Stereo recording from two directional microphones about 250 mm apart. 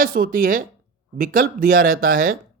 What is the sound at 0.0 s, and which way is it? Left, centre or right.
Speech, right.